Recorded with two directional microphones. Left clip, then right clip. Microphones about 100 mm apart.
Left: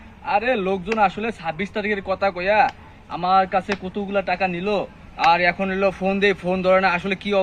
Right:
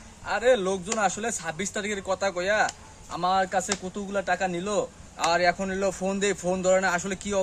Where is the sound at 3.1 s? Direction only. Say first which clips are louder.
Left 6 dB; 60° right (ahead or behind).